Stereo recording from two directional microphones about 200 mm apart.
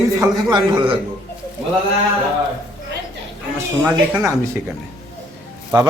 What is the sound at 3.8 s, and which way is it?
Speech, 10° right (ahead or behind).